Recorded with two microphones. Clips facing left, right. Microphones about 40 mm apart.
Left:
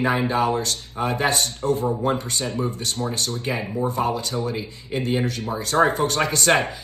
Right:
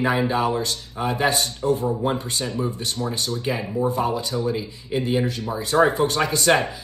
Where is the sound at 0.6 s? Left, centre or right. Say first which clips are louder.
Even; right.